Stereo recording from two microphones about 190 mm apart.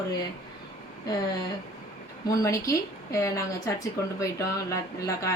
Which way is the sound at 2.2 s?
15° left (ahead or behind).